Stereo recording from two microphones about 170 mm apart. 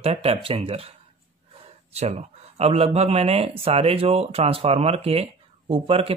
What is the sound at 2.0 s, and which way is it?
Speech, 40° right (ahead or behind).